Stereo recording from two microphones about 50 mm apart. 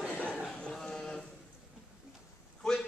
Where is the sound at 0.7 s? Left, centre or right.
Centre.